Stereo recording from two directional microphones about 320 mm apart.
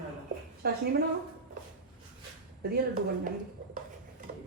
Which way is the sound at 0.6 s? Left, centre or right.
Right.